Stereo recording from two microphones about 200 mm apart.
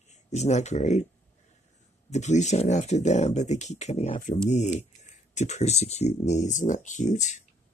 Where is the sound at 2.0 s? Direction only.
35° left (ahead or behind).